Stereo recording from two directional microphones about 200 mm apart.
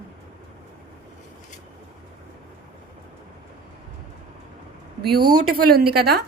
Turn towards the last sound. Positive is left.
turn(degrees=-50)  # may be behind; listen again after turning